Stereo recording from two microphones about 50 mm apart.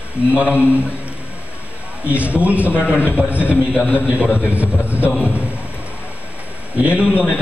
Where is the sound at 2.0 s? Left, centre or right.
Right.